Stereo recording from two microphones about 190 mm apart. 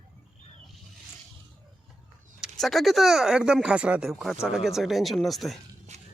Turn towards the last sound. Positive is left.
turn(degrees=0)  # may be behind; listen again after turning